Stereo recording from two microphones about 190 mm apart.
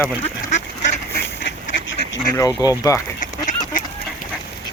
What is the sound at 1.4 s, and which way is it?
Duck, 75° left (ahead or behind).